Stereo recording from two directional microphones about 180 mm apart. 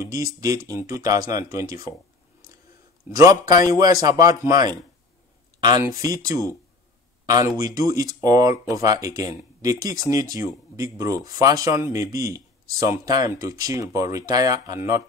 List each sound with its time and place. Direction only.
0.0 s speech: 20° right (ahead or behind)
3.3 s speech: 20° right (ahead or behind)